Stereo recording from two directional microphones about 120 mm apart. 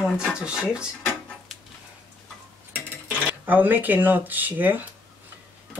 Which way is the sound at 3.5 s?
15° right (ahead or behind).